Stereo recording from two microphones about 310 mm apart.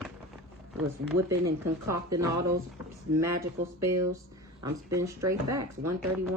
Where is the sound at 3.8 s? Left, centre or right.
Right.